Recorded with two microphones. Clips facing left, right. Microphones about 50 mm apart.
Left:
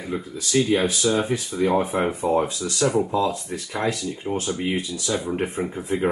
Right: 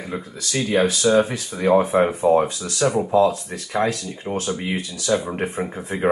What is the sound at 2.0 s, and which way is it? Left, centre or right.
Speech, centre.